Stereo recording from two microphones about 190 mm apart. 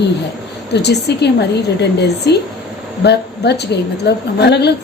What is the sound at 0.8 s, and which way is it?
A woman's voice, 60° left (ahead or behind).